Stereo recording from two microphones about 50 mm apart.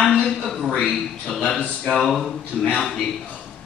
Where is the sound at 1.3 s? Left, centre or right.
Centre.